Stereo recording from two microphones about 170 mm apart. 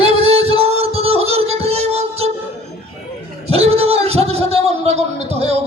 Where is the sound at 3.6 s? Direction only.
35° right (ahead or behind).